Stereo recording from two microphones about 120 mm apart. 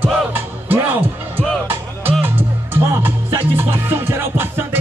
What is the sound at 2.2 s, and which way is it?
Music, 20° right (ahead or behind).